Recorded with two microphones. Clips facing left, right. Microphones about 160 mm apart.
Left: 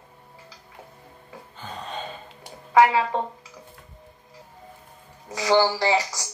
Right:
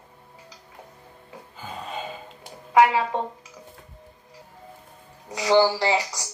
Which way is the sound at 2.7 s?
20° right (ahead or behind).